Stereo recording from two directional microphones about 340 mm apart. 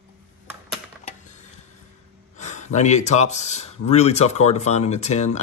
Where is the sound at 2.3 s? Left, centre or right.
Left.